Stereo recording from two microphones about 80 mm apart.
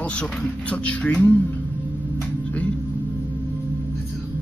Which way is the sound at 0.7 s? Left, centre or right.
Centre.